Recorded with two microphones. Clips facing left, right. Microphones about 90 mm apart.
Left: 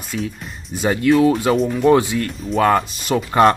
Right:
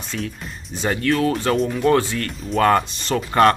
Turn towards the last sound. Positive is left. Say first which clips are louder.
# left 2 dB
turn(degrees=10)  # may be behind; listen again after turning